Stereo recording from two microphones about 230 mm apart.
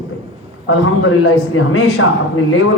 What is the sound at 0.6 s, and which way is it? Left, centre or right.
Speech, left.